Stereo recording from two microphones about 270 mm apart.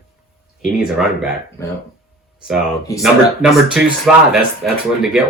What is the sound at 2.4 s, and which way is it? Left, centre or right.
Speech, centre.